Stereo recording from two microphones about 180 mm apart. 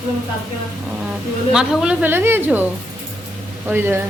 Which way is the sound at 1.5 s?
5° right (ahead or behind).